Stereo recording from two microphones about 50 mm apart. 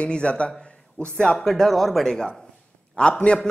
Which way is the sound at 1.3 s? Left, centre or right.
Centre.